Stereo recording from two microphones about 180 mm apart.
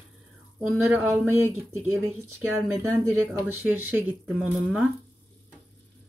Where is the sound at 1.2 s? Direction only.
15° right (ahead or behind).